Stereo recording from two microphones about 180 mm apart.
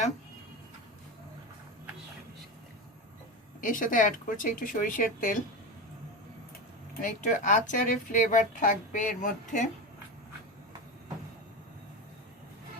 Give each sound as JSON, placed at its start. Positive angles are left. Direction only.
{"t": 3.6, "sound": "speech", "side_deg": 45}
{"t": 7.0, "sound": "speech", "side_deg": 45}